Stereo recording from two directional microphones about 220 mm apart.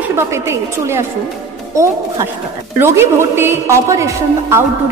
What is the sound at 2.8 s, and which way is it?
A woman's voice, 10° right (ahead or behind).